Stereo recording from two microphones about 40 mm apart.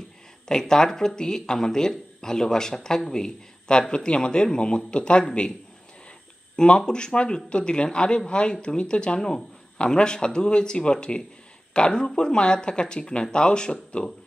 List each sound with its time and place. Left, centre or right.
0.5 s a man's voice: centre
6.5 s a man's voice: left